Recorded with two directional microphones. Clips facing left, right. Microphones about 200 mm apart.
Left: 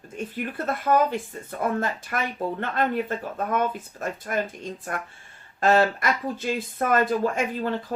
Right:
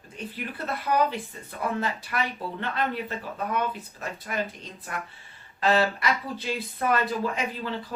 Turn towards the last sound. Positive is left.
turn(degrees=50)  # may be behind; listen again after turning